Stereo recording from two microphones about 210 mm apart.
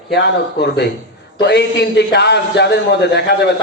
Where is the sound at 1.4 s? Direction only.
55° left (ahead or behind).